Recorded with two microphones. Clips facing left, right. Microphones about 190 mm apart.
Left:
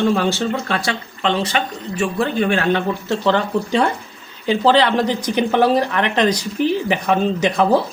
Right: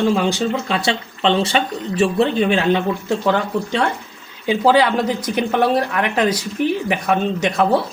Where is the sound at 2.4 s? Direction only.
20° right (ahead or behind).